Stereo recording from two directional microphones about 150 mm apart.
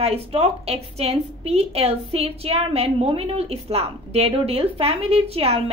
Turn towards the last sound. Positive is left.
turn(degrees=-40)  # may be behind; listen again after turning